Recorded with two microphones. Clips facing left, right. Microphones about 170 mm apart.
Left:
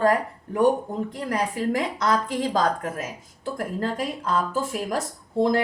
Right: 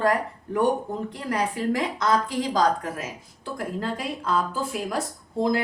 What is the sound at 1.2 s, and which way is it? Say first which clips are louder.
Speech: left 1 dB; 40° left (ahead or behind).